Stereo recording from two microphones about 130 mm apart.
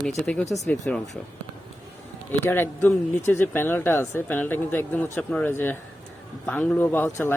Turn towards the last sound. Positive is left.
turn(degrees=15)  # may be behind; listen again after turning